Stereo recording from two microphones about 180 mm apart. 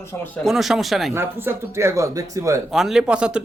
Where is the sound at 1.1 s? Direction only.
10° right (ahead or behind).